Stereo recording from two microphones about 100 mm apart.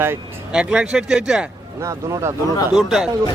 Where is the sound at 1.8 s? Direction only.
30° right (ahead or behind).